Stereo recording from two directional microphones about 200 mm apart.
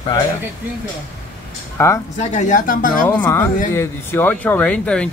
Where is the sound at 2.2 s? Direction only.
35° left (ahead or behind).